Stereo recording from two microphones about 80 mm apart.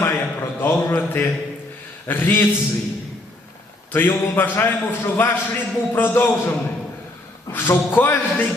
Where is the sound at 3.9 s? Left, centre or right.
Left.